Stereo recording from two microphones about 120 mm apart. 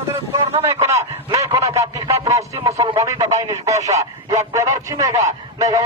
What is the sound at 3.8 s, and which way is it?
Speech, 65° right (ahead or behind).